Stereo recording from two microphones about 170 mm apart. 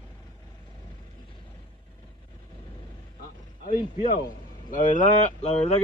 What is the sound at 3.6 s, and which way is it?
A man's voice, 55° left (ahead or behind).